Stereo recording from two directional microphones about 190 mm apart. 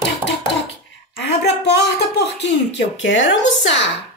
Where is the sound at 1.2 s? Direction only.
60° left (ahead or behind).